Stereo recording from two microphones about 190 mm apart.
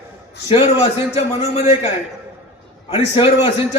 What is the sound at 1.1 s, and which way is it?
Speech, 30° left (ahead or behind).